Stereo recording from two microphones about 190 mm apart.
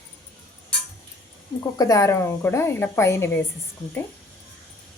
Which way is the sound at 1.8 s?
20° left (ahead or behind).